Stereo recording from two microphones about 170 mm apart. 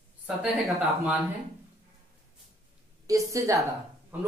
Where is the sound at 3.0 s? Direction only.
20° right (ahead or behind).